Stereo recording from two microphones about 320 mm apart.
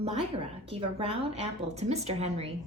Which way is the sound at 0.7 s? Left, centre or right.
Centre.